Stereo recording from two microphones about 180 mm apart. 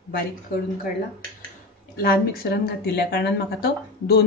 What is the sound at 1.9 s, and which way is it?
Speech, 55° left (ahead or behind).